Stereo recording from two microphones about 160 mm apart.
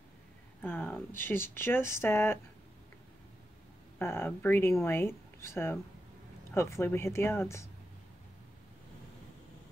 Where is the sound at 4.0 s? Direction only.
15° left (ahead or behind).